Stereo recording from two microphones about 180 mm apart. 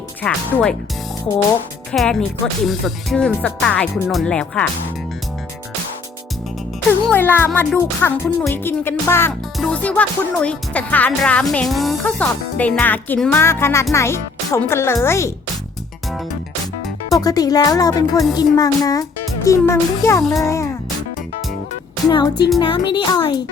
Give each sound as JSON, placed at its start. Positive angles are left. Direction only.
{"t": 0.2, "sound": "speech", "side_deg": 5}
{"t": 1.9, "sound": "speech", "side_deg": 0}
{"t": 7.0, "sound": "speech", "side_deg": 10}
{"t": 17.1, "sound": "speech", "side_deg": 20}
{"t": 22.0, "sound": "speech", "side_deg": 25}